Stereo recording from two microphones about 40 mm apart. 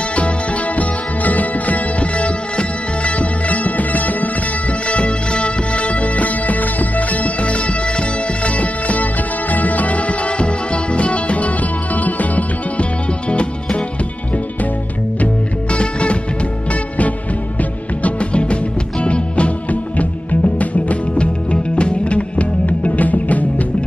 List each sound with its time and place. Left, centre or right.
0.7 s music: left
4.8 s music: left
13.3 s music: left
15.7 s music: left
17.6 s music: left